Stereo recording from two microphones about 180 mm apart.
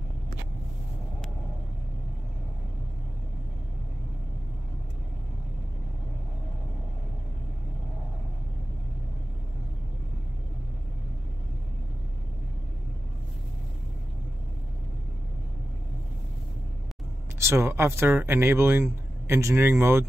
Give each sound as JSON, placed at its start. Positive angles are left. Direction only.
{"t": 17.4, "sound": "speech", "side_deg": -15}